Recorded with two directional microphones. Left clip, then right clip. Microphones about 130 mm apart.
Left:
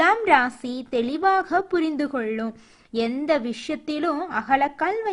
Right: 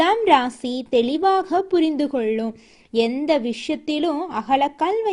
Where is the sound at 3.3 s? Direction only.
15° right (ahead or behind).